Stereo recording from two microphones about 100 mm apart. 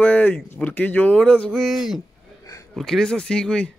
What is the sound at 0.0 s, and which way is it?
Speech, 15° left (ahead or behind).